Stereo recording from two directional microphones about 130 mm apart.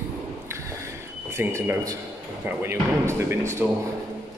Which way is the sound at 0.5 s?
20° right (ahead or behind).